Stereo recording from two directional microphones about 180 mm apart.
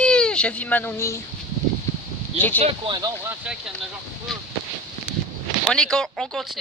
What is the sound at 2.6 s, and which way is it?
Speech, 30° right (ahead or behind).